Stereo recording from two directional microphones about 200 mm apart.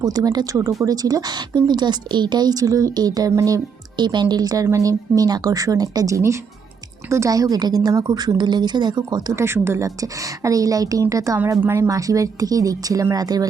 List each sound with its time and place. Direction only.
0.0 s a woman's voice: 20° right (ahead or behind)